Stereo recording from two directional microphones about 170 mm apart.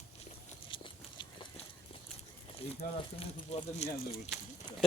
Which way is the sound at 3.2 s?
40° left (ahead or behind).